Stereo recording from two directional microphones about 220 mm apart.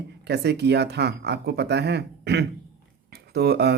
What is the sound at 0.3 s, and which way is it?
Speech, 50° right (ahead or behind).